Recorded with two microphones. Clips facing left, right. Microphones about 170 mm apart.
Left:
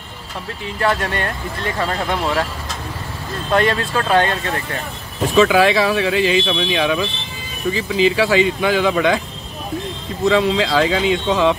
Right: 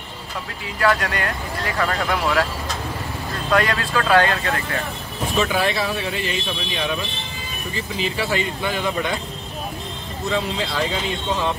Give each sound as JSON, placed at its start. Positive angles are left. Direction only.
{"t": 0.7, "sound": "speech", "side_deg": 25}
{"t": 3.5, "sound": "speech", "side_deg": 25}
{"t": 5.4, "sound": "speech", "side_deg": 90}
{"t": 10.2, "sound": "speech", "side_deg": 90}